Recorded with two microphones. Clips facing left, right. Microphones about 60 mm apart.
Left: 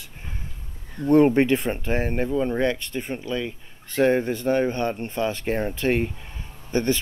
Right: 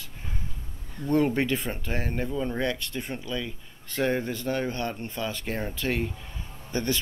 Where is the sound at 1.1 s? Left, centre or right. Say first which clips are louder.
Left 7 dB; left.